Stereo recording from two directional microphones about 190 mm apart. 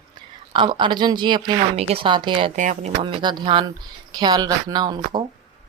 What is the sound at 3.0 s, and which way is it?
Speech, 25° right (ahead or behind).